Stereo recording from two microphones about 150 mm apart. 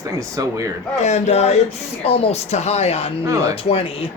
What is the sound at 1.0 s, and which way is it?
Speech, 50° left (ahead or behind).